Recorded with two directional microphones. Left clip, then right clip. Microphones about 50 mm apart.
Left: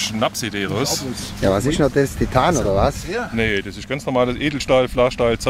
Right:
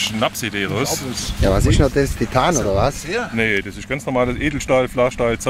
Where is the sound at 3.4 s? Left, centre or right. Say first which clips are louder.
Right 1 dB; centre.